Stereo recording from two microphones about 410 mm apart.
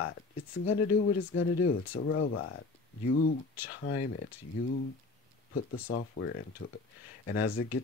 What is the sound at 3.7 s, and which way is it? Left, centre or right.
Speech, left.